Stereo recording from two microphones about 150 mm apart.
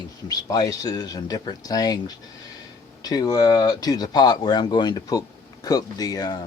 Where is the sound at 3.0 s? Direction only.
25° left (ahead or behind).